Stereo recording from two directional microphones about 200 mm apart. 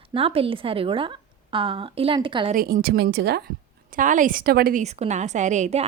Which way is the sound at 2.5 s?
45° right (ahead or behind).